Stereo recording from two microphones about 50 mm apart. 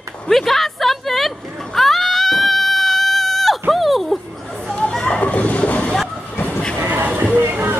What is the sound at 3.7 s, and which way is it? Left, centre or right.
Dog, centre.